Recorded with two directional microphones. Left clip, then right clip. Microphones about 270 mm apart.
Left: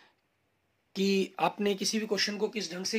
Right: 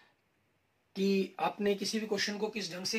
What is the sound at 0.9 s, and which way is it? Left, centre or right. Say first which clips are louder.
Speech: left 3 dB; left.